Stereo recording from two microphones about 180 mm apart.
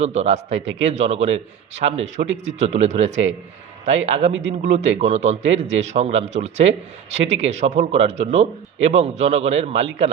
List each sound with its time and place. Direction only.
0.0 s speech: 40° right (ahead or behind)
4.3 s a man's voice: 90° right
4.6 s speech: 40° right (ahead or behind)